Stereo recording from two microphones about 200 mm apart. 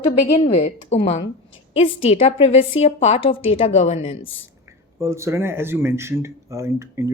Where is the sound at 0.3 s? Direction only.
35° left (ahead or behind).